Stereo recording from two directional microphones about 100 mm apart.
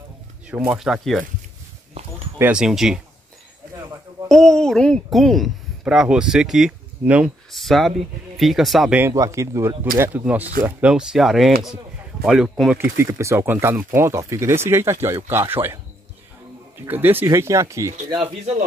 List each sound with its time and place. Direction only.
0.7 s a child's voice: 5° right (ahead or behind)
2.5 s a child's voice: 5° right (ahead or behind)
4.3 s a child's voice: 5° left (ahead or behind); by 7.3 s 10° right (ahead or behind)
7.5 s a child's voice: centre (ahead or behind)
9.1 s a child's voice: 30° right (ahead or behind); by 12.7 s 5° right (ahead or behind)
12.7 s speech: 25° right (ahead or behind)
16.8 s speech: 20° right (ahead or behind)
17.3 s speech: 30° right (ahead or behind)